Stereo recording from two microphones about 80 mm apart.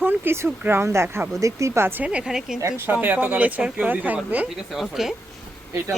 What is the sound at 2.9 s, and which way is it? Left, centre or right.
Speech, right.